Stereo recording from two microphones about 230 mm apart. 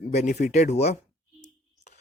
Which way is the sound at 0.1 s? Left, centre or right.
Left.